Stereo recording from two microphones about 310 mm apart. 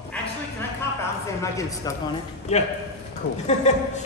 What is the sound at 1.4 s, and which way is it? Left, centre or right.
Speech, centre.